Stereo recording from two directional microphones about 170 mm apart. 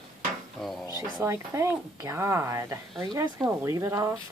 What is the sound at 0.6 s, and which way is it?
Speech, centre (ahead or behind).